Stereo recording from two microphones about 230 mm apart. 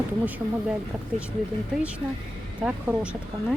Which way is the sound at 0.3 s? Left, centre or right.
Centre.